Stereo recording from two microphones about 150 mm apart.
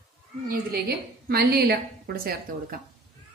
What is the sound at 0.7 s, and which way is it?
A woman's voice, 90° right.